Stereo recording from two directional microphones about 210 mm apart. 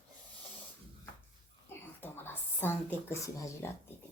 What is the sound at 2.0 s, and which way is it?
Speech, 10° left (ahead or behind).